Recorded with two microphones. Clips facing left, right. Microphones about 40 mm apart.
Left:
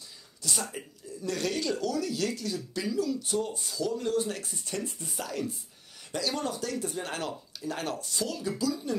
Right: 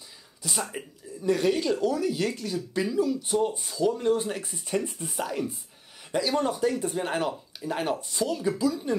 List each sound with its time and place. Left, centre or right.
0.4 s speech: centre